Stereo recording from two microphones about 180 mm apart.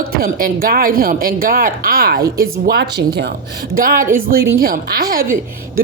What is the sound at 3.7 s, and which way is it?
Speech, 50° right (ahead or behind).